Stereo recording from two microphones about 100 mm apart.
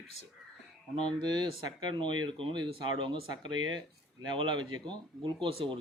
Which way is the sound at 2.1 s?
50° right (ahead or behind).